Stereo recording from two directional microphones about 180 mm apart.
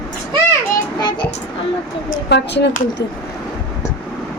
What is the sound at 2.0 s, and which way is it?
Speech, 70° left (ahead or behind).